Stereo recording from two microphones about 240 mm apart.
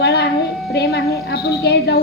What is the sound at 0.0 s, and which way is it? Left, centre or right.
Music, left.